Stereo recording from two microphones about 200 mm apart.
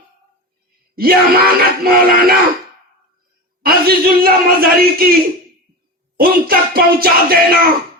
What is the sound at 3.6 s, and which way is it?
Speech, 50° right (ahead or behind).